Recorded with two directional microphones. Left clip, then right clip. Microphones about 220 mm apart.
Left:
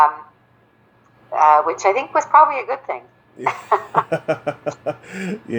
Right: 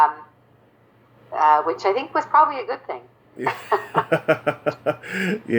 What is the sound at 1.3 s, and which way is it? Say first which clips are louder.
A woman's voice: left 4 dB; 35° left (ahead or behind).